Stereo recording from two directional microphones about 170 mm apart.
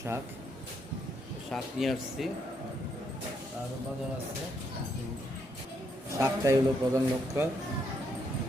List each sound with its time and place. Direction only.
1.5 s speech: centre (ahead or behind)
6.1 s a man's voice: 20° right (ahead or behind)